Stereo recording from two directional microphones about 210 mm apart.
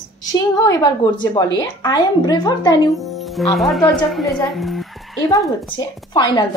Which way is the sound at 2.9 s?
Centre (ahead or behind).